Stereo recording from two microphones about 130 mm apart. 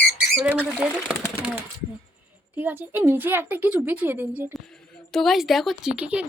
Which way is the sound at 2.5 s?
15° right (ahead or behind).